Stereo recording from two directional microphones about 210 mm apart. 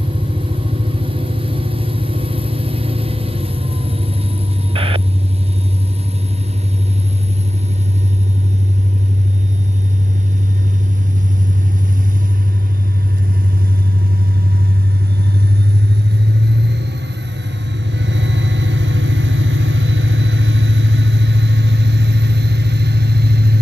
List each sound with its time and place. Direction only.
1.0 s vehicle: 25° right (ahead or behind)
17.9 s vehicle: 60° right (ahead or behind)